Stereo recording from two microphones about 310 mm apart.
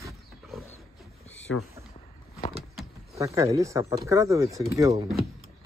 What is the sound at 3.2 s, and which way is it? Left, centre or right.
Speech, centre.